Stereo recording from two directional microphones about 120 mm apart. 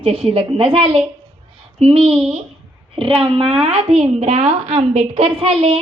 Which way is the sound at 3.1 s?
50° right (ahead or behind).